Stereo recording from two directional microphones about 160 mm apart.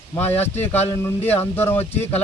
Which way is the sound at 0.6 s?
40° left (ahead or behind).